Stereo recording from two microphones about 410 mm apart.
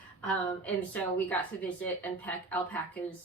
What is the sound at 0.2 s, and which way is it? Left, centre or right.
A woman's voice, centre.